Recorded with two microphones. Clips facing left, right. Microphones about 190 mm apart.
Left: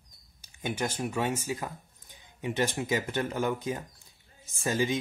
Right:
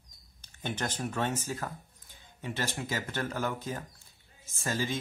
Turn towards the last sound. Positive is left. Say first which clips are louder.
# left 4 dB
turn(degrees=15)  # may be behind; listen again after turning